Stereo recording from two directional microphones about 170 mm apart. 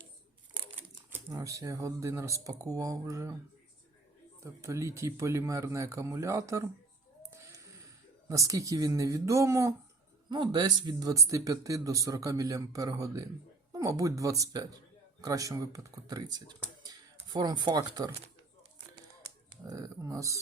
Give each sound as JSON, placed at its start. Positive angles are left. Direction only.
{"t": 1.1, "sound": "speech", "side_deg": -20}
{"t": 4.4, "sound": "speech", "side_deg": -15}
{"t": 7.2, "sound": "music", "side_deg": -20}
{"t": 8.3, "sound": "speech", "side_deg": -20}
{"t": 16.8, "sound": "a sound", "side_deg": -25}
{"t": 19.6, "sound": "speech", "side_deg": -20}